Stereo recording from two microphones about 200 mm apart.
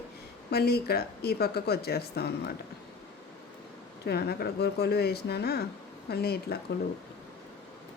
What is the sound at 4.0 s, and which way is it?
Speech, 50° left (ahead or behind).